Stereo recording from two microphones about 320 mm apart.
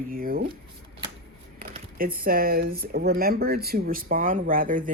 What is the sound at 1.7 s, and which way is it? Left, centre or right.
Speech, right.